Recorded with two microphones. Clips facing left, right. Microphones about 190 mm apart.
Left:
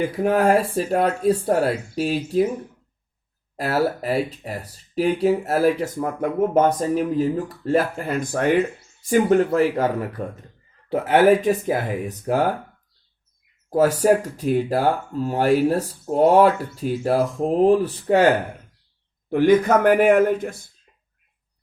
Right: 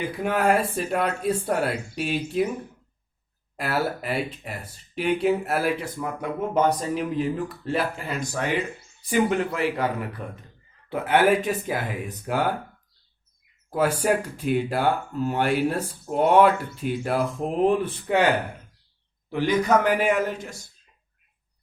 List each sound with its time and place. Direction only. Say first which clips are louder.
0.2 s speech: left 4 dB; 35° left (ahead or behind)
3.6 s speech: left 5 dB; 30° left (ahead or behind)
13.7 s speech: left 6 dB; 35° left (ahead or behind)
19.3 s speech: left 5 dB; 50° left (ahead or behind)